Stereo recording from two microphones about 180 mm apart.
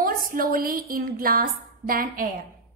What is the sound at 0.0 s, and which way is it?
A woman's voice, 50° right (ahead or behind).